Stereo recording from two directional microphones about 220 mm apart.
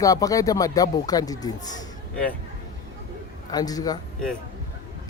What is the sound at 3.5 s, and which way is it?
Speech, 15° left (ahead or behind).